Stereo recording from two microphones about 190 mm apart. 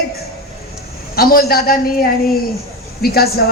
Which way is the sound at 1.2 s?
50° left (ahead or behind).